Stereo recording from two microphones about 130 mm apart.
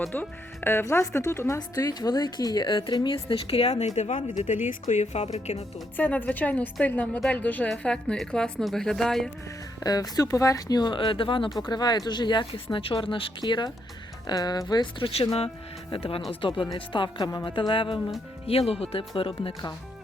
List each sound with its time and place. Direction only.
0.1 s speech: 15° left (ahead or behind); by 5.6 s 55° left (ahead or behind)
6.0 s a woman's voice: 15° left (ahead or behind)
9.8 s speech: 30° left (ahead or behind)